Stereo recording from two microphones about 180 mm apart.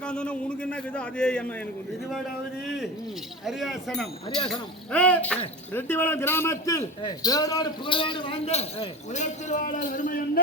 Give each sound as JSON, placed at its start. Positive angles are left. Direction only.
{"t": 0.0, "sound": "a man's voice", "side_deg": 5}
{"t": 2.6, "sound": "a man's voice", "side_deg": 0}